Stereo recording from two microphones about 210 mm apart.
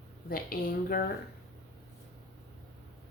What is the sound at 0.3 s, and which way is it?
Speech, 45° left (ahead or behind).